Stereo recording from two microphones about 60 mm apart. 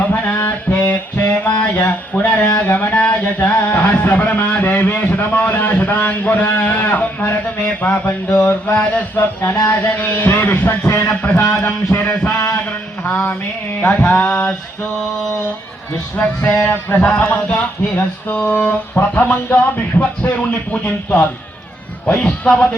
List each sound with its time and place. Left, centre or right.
0.0 s mantra: left
0.9 s music: left
2.7 s a man's voice: left
9.1 s a man's voice: left
16.1 s a man's voice: left
16.9 s a man's voice: centre